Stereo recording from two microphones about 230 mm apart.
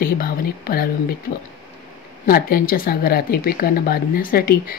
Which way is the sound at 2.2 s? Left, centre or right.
Left.